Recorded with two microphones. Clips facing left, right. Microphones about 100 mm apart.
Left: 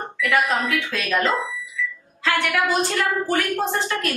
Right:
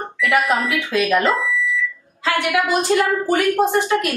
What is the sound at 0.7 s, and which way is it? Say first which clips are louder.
Speech: right 5 dB; 15° right (ahead or behind).